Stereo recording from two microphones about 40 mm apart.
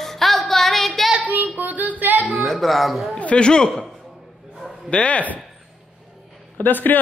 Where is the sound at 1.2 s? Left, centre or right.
Right.